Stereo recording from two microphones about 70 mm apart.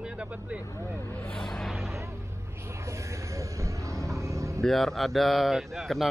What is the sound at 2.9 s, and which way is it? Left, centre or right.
Speech, right.